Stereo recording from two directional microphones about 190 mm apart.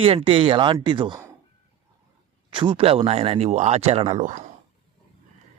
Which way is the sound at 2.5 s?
25° right (ahead or behind).